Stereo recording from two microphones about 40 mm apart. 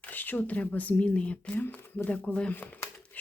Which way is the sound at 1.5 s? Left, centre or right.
Left.